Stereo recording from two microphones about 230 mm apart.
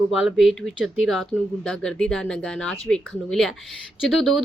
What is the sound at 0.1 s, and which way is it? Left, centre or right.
Speech, centre.